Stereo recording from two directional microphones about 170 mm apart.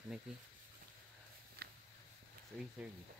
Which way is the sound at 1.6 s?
70° right (ahead or behind).